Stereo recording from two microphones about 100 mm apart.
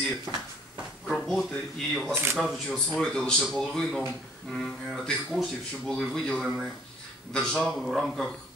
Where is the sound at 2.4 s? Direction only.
Centre (ahead or behind).